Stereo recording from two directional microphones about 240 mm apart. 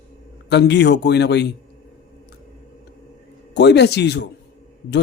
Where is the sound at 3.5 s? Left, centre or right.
Left.